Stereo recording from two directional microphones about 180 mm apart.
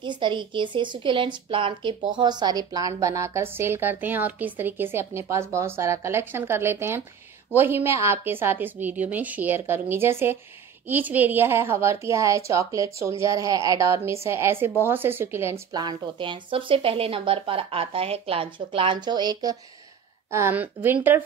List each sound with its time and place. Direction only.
0.0 s a woman's voice: 25° right (ahead or behind)
15.7 s a woman's voice: 25° right (ahead or behind)